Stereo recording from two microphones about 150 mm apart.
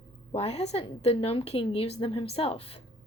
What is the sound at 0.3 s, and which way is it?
A woman's voice, 45° left (ahead or behind).